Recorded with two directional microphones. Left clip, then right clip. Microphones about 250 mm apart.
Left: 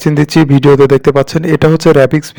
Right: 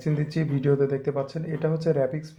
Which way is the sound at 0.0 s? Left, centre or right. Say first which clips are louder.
Left 19 dB; left.